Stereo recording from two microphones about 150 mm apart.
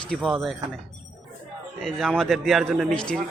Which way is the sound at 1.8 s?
Centre (ahead or behind).